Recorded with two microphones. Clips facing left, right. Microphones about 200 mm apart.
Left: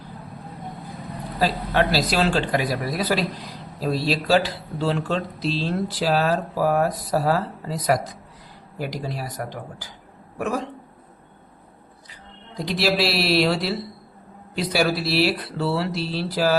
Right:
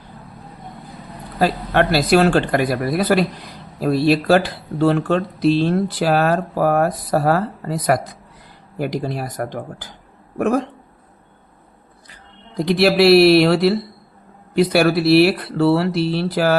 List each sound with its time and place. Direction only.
1.4 s speech: 55° right (ahead or behind)
12.5 s speech: 60° right (ahead or behind)